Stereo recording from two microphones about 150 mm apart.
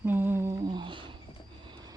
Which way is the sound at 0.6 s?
30° right (ahead or behind).